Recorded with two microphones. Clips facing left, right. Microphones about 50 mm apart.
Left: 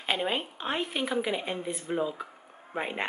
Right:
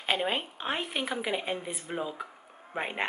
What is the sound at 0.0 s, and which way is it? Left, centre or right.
Speech, centre.